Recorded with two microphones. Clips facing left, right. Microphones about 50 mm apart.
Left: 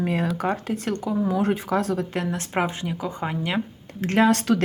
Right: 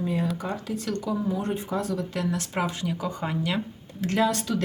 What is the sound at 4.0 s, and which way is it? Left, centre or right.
Speech, left.